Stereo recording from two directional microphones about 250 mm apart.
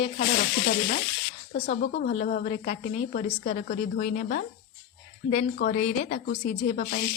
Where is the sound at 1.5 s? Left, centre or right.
Left.